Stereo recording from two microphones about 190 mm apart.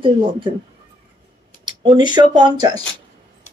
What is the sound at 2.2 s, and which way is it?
Speech, 25° right (ahead or behind).